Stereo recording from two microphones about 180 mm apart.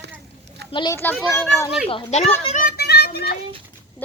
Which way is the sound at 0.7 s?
25° left (ahead or behind).